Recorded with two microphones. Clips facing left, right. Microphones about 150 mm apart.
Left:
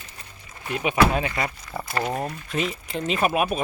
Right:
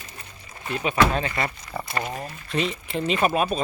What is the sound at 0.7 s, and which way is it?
Speech, 10° left (ahead or behind).